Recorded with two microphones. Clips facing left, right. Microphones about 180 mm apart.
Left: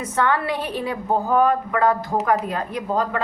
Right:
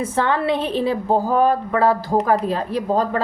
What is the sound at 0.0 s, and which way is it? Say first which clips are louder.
A woman's voice: right 2 dB; 30° right (ahead or behind).